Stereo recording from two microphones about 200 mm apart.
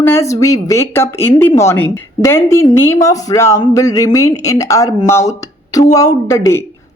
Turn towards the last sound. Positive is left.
turn(degrees=15)  # may be behind; listen again after turning